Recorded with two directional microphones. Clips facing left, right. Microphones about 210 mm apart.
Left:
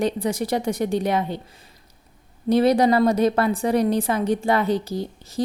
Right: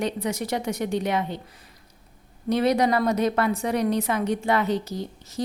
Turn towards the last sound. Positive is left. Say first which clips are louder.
# left 4 dB
turn(degrees=30)  # may be behind; listen again after turning